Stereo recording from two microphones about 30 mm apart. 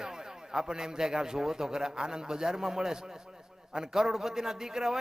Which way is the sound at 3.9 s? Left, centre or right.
Centre.